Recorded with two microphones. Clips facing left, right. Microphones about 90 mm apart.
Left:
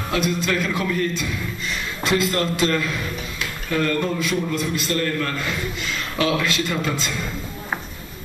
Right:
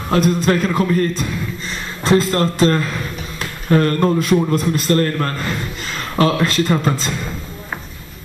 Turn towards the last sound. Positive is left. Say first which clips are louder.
# right 6 dB
turn(degrees=-40)  # may be behind; listen again after turning